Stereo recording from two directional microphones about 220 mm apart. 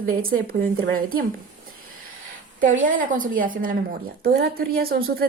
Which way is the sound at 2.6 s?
35° right (ahead or behind).